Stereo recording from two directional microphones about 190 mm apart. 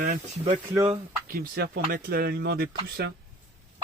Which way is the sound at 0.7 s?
20° right (ahead or behind).